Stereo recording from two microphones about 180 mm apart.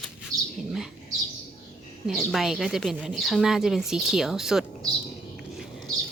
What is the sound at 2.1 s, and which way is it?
Speech, centre (ahead or behind).